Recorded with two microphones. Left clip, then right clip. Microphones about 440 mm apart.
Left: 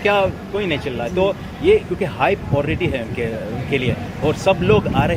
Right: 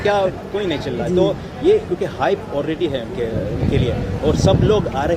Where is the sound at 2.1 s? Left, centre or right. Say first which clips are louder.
Left 2 dB; left.